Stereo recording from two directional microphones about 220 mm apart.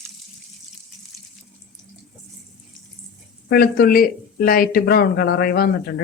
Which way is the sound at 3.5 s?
45° left (ahead or behind).